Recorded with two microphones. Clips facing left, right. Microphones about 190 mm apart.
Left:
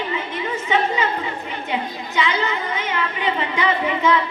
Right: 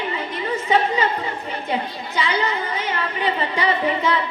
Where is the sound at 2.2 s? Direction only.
35° right (ahead or behind).